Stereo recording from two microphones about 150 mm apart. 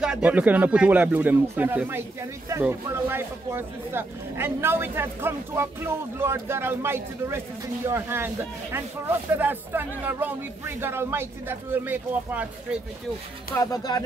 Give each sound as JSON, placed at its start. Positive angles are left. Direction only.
{"t": 0.0, "sound": "speech", "side_deg": -5}
{"t": 13.6, "sound": "speech", "side_deg": 25}